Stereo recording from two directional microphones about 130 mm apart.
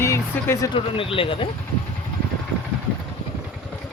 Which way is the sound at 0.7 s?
45° left (ahead or behind).